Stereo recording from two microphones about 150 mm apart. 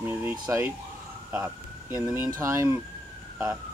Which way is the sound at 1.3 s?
10° right (ahead or behind).